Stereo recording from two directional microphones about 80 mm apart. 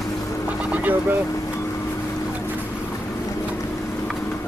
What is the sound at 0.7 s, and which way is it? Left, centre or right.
Vehicle, right.